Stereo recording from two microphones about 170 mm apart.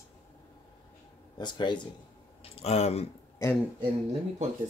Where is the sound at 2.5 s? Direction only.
40° left (ahead or behind).